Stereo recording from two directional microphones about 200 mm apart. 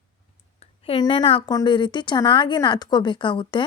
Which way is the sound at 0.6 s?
30° left (ahead or behind).